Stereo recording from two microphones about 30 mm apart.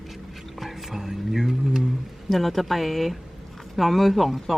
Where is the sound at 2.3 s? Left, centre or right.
Centre.